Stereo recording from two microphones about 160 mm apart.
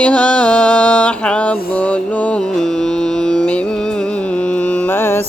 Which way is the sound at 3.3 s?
5° left (ahead or behind).